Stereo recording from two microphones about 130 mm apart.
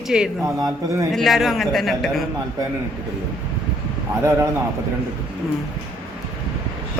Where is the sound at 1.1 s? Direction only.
Centre (ahead or behind).